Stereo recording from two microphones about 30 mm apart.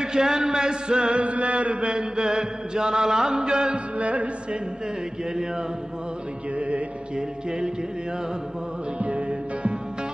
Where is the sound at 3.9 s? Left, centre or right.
Right.